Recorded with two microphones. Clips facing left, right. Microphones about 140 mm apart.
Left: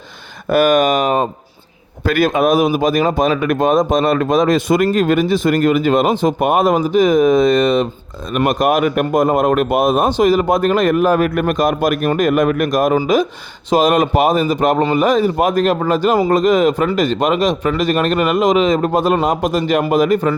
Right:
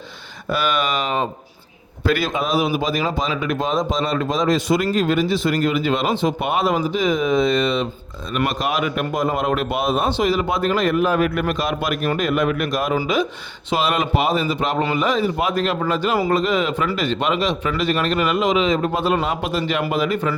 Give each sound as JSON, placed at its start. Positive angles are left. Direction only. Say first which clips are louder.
{"t": 0.5, "sound": "a man's voice", "louder": "left 9 dB", "side_deg": 45}